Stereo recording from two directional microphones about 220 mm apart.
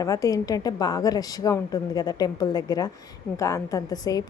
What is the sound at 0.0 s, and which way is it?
A woman's voice, 15° left (ahead or behind).